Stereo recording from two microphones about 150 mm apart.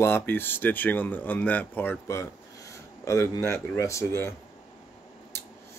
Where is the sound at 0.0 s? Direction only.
15° left (ahead or behind).